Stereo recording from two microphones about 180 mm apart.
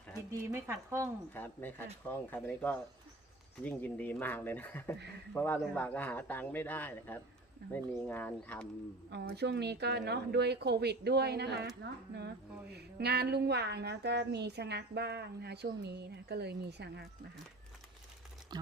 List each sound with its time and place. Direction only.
0.3 s speech: 15° right (ahead or behind)
1.3 s a man's voice: 10° left (ahead or behind)
9.1 s a woman's voice: 65° right (ahead or behind)
18.5 s speech: 25° right (ahead or behind)